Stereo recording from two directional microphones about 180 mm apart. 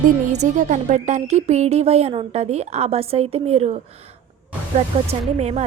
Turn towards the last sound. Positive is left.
turn(degrees=-35)  # may be behind; listen again after turning